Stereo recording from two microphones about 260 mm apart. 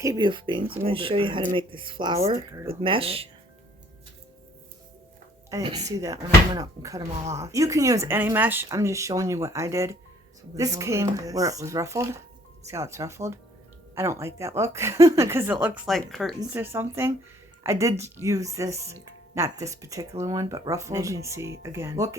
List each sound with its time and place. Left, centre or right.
0.0 s speech: centre
5.5 s speech: centre